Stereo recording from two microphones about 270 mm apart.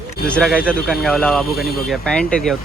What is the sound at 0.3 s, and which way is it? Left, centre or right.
Speech, centre.